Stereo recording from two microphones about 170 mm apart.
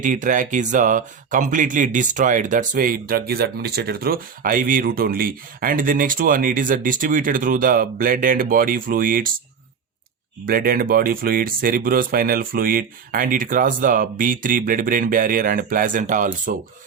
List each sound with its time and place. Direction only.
0.0 s speech: 50° right (ahead or behind)
10.4 s speech: 60° right (ahead or behind)